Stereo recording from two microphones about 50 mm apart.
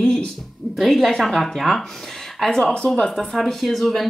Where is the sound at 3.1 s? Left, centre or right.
Centre.